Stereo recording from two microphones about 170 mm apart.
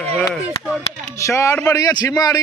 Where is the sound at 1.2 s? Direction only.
15° left (ahead or behind).